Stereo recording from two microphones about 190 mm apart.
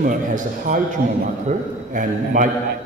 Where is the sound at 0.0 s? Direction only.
45° right (ahead or behind).